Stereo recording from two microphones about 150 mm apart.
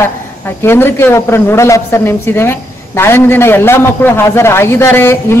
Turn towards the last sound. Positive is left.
turn(degrees=15)  # may be behind; listen again after turning